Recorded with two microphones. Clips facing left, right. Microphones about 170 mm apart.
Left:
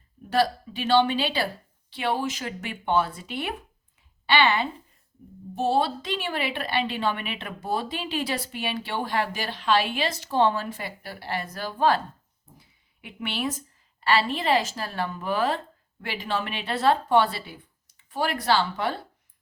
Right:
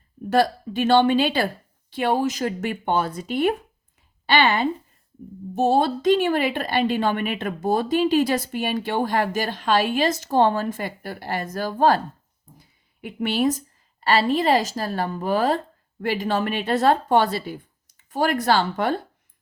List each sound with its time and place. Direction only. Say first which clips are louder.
0.3 s a woman's voice: right 4 dB; 50° right (ahead or behind)